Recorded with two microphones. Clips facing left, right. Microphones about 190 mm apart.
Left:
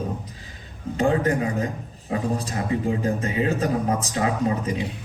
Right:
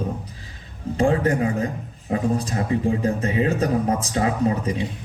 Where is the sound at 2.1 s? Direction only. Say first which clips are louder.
Right 3 dB; 35° left (ahead or behind).